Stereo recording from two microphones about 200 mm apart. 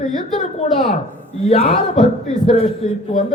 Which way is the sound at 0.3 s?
35° left (ahead or behind).